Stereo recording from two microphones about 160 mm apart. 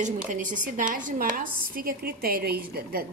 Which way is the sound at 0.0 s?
55° right (ahead or behind).